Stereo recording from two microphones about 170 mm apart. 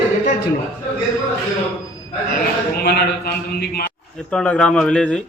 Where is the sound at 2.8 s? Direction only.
65° left (ahead or behind).